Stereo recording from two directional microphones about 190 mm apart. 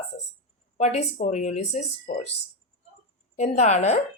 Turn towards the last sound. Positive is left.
turn(degrees=35)  # may be behind; listen again after turning